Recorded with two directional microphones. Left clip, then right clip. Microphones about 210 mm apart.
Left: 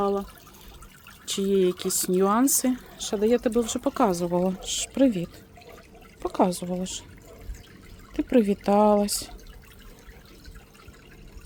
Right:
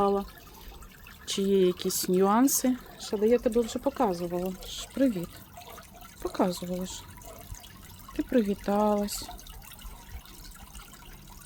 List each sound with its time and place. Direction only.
0.0 s speech: 5° left (ahead or behind)
3.0 s speech: 20° left (ahead or behind)
8.1 s speech: 25° left (ahead or behind)